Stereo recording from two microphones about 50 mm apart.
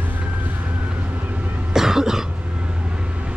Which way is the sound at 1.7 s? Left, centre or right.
Centre.